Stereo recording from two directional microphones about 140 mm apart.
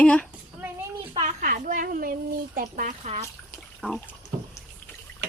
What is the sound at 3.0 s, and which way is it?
Speech, 55° right (ahead or behind).